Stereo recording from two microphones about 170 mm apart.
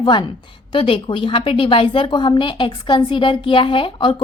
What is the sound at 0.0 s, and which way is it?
A woman's voice, 25° left (ahead or behind).